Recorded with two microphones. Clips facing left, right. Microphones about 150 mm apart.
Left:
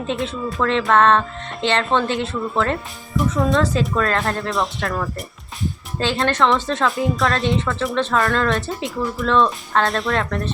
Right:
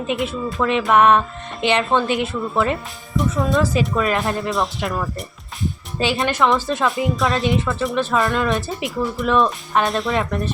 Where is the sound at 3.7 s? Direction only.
20° right (ahead or behind).